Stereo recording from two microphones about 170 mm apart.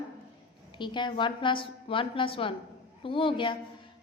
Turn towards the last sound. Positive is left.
turn(degrees=30)  # may be behind; listen again after turning